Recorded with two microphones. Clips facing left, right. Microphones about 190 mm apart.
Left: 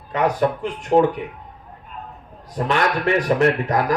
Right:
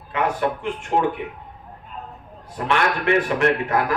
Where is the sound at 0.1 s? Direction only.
40° left (ahead or behind).